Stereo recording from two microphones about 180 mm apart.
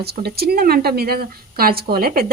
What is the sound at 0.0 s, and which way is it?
Speech, 60° right (ahead or behind).